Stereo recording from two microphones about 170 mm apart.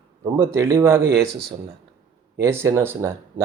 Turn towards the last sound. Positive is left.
turn(degrees=-15)  # may be behind; listen again after turning